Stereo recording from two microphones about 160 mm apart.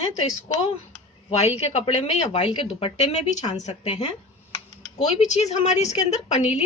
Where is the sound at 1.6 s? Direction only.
40° left (ahead or behind).